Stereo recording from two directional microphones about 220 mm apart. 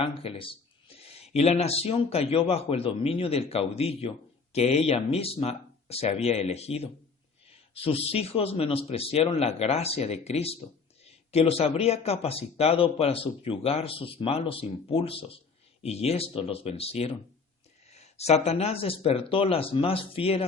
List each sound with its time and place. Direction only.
0.0 s speech: 25° left (ahead or behind)